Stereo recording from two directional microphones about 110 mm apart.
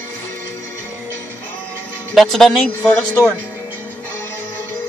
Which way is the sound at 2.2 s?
Centre (ahead or behind).